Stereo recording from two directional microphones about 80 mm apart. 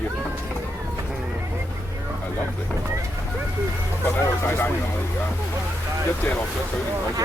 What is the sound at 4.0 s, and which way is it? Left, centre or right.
Speech, left.